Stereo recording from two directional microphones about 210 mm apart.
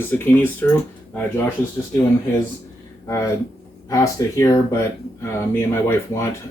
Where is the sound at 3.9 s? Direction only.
15° left (ahead or behind).